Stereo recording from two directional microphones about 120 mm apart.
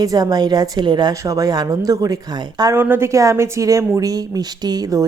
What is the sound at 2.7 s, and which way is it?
A woman's voice, 20° right (ahead or behind).